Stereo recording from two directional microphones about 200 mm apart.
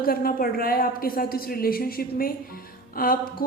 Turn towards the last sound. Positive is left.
turn(degrees=45)  # may be behind; listen again after turning